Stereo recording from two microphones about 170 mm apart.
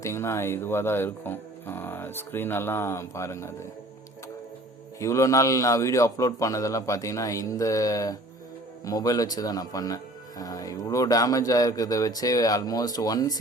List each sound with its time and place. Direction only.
0.0 s speech: 15° left (ahead or behind)
4.9 s speech: 20° left (ahead or behind)